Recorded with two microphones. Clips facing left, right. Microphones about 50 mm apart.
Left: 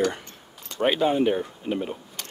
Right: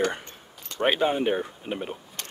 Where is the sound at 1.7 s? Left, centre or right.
Centre.